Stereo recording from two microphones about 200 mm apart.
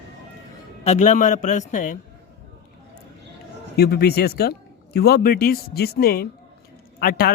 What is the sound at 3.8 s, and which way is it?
Speech, 55° left (ahead or behind).